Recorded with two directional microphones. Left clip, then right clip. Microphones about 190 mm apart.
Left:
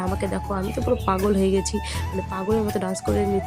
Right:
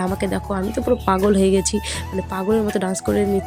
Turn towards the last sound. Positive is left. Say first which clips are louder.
# right 4 dB
turn(degrees=-20)  # may be behind; listen again after turning